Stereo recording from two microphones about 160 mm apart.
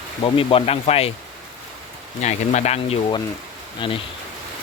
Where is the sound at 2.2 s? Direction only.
45° left (ahead or behind).